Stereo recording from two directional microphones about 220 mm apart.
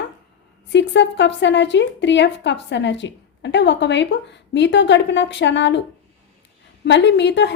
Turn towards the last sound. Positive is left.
turn(degrees=55)  # may be behind; listen again after turning